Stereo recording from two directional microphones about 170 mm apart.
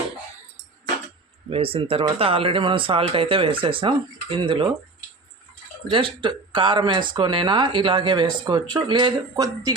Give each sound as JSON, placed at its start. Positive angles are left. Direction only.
{"t": 1.5, "sound": "speech", "side_deg": -35}
{"t": 5.9, "sound": "speech", "side_deg": -30}